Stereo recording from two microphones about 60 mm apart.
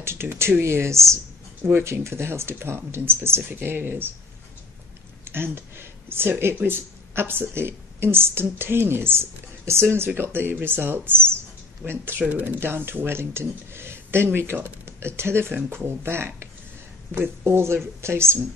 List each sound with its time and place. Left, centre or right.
0.0 s speech: right
5.2 s speech: right
12.3 s speech: right
12.5 s speech: right
17.4 s speech: right